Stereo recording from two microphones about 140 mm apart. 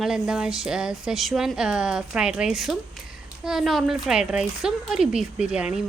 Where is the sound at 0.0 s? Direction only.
5° right (ahead or behind).